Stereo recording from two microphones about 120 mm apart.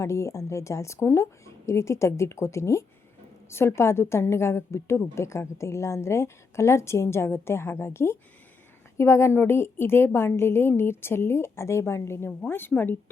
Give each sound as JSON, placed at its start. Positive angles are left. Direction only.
{"t": 0.0, "sound": "a woman's voice", "side_deg": 25}